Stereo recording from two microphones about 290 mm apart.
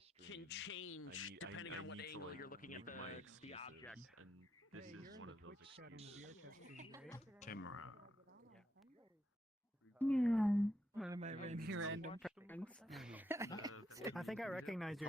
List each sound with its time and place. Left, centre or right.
0.2 s a man's voice: left
3.9 s speech: right
6.0 s speech: right
7.3 s speech: left
7.6 s speech: left
10.0 s a woman's voice: centre
11.2 s speech: right
11.7 s speech: right
12.2 s speech: centre
14.2 s speech: centre